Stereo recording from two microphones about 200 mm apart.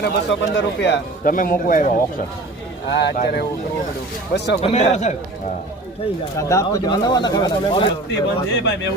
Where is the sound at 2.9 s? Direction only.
55° left (ahead or behind).